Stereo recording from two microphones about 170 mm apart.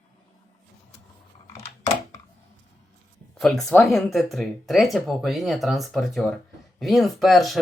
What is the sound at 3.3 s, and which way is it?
Speech, centre (ahead or behind).